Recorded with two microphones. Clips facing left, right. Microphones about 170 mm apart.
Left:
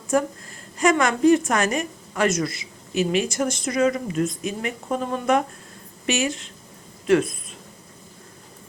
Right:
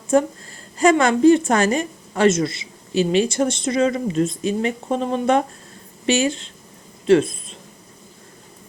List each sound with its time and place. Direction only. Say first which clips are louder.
0.1 s a woman's voice: right 4 dB; 25° right (ahead or behind)